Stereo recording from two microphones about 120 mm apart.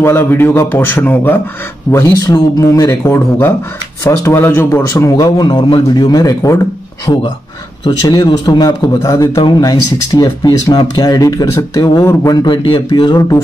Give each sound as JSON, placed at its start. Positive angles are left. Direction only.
{"t": 0.0, "sound": "a man's voice", "side_deg": 20}
{"t": 12.4, "sound": "a man's voice", "side_deg": 45}